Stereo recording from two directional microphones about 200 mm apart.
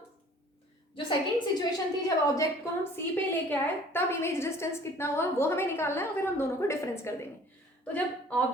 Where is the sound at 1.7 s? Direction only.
15° left (ahead or behind).